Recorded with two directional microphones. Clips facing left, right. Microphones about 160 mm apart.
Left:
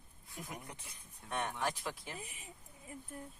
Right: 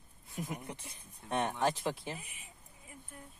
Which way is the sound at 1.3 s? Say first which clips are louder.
Right 6 dB; 25° right (ahead or behind).